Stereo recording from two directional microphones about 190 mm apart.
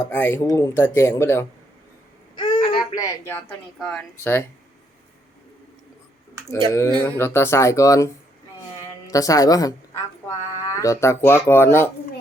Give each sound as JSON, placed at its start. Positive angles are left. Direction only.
{"t": 0.1, "sound": "a woman's voice", "side_deg": 10}
{"t": 2.4, "sound": "a sound", "side_deg": 30}
{"t": 2.9, "sound": "a woman's voice", "side_deg": 15}
{"t": 3.8, "sound": "a woman's voice", "side_deg": 5}
{"t": 6.7, "sound": "a woman's voice", "side_deg": 10}